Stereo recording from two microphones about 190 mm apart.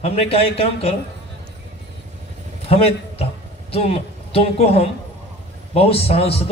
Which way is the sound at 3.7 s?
30° left (ahead or behind).